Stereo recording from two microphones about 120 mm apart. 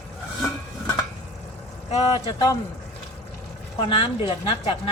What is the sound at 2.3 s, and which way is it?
Speech, 30° left (ahead or behind).